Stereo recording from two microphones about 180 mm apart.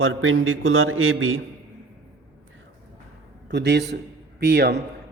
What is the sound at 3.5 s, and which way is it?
A man's voice, 70° right (ahead or behind).